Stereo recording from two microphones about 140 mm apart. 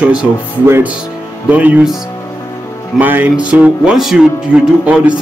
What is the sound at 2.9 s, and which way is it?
Speech, 10° right (ahead or behind).